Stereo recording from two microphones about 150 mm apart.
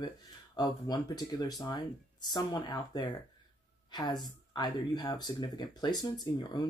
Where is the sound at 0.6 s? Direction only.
25° left (ahead or behind).